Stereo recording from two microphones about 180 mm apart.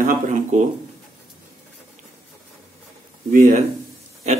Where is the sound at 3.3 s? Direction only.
50° right (ahead or behind).